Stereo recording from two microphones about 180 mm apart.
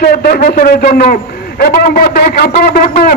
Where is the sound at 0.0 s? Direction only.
55° left (ahead or behind).